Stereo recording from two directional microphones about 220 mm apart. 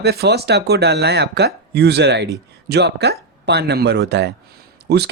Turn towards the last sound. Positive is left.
turn(degrees=-50)  # may be behind; listen again after turning